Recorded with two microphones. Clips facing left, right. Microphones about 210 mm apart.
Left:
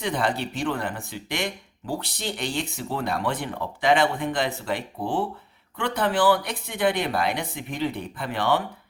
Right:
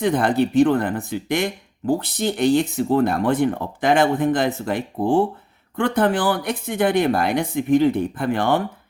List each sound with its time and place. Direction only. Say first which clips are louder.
0.0 s speech: right 8 dB; 50° right (ahead or behind)